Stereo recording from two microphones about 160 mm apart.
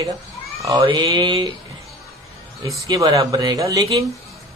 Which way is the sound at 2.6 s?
20° right (ahead or behind).